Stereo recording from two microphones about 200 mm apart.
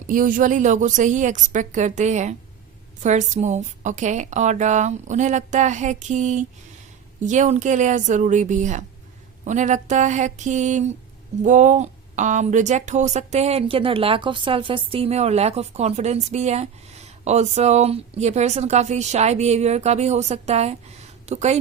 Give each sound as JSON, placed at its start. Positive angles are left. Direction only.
{"t": 0.1, "sound": "a woman's voice", "side_deg": -45}